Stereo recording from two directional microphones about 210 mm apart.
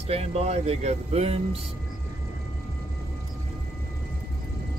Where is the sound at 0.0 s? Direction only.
30° right (ahead or behind).